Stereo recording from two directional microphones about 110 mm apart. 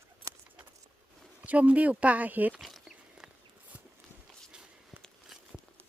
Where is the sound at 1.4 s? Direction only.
15° right (ahead or behind).